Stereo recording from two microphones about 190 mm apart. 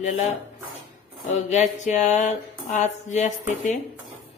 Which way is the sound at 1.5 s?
40° left (ahead or behind).